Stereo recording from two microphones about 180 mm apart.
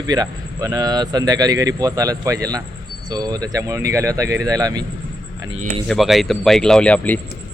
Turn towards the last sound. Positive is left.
turn(degrees=10)  # may be behind; listen again after turning